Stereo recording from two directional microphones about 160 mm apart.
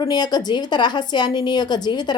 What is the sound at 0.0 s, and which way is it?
A woman's voice, 25° left (ahead or behind).